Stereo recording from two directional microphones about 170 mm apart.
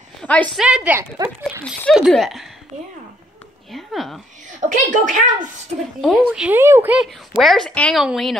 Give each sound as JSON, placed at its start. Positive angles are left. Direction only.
{"t": 0.2, "sound": "a sound", "side_deg": 10}
{"t": 0.6, "sound": "a woman's voice", "side_deg": -5}
{"t": 3.7, "sound": "speech", "side_deg": 0}
{"t": 4.5, "sound": "speech", "side_deg": -50}
{"t": 5.9, "sound": "speech", "side_deg": 0}